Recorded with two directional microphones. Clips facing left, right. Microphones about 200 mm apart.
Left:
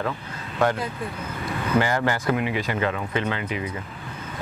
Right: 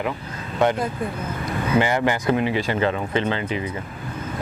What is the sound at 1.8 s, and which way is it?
Speech, 20° right (ahead or behind).